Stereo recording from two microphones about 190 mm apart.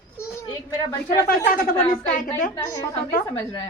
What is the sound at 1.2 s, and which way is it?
A woman's voice, 50° left (ahead or behind).